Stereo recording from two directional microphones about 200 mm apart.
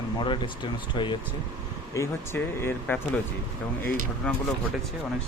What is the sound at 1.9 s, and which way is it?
Speech, 15° left (ahead or behind).